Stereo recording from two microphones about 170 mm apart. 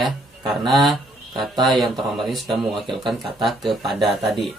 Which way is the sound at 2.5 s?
Centre (ahead or behind).